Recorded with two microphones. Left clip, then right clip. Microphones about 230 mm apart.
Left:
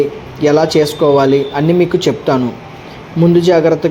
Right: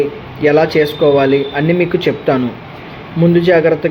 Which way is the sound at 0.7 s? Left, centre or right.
Left.